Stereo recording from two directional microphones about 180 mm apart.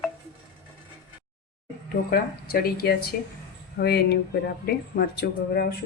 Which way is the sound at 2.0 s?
55° left (ahead or behind).